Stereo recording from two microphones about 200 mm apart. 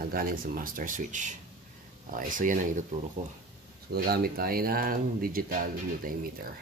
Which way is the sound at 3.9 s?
50° right (ahead or behind).